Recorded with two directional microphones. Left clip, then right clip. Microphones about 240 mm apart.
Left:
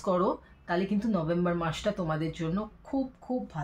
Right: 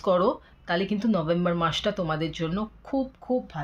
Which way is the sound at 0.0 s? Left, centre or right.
Right.